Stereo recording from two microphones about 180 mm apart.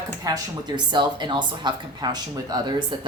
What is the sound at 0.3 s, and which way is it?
Speech, 20° right (ahead or behind).